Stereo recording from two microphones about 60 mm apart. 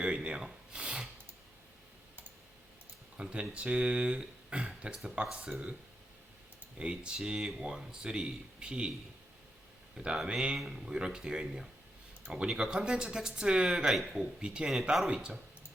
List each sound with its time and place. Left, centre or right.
0.0 s a sound: centre
3.2 s speech: centre
6.7 s speech: centre
10.2 s speech: centre
14.9 s a man's voice: centre